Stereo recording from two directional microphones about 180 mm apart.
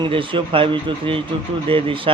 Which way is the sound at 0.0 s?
30° right (ahead or behind).